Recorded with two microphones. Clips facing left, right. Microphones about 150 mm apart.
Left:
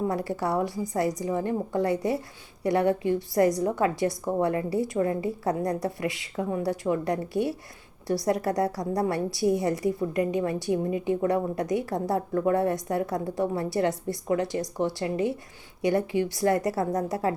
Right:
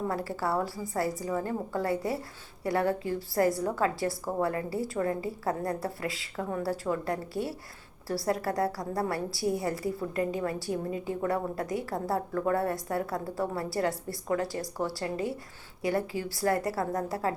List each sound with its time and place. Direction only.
0.1 s a woman's voice: 20° left (ahead or behind)